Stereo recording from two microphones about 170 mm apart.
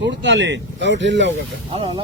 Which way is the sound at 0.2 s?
90° right.